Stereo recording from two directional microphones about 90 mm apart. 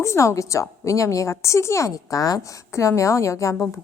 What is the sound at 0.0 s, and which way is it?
Speech, 35° left (ahead or behind).